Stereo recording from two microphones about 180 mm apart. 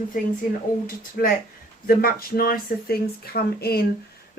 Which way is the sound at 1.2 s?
60° left (ahead or behind).